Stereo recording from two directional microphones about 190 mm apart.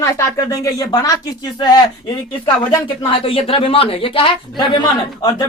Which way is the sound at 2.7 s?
30° left (ahead or behind).